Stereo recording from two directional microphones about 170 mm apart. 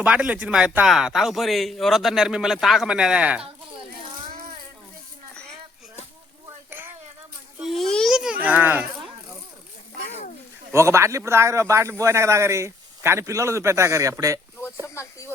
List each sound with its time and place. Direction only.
0.0 s speech: 5° right (ahead or behind)
6.7 s a sound: 10° right (ahead or behind)
7.6 s a sound: centre (ahead or behind)
8.4 s a man's voice: 10° right (ahead or behind)
10.7 s a man's voice: 15° right (ahead or behind)
14.8 s speech: 15° left (ahead or behind)